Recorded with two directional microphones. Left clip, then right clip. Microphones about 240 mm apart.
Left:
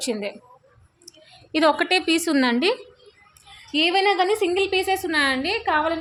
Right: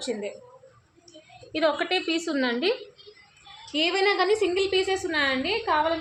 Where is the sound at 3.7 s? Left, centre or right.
Left.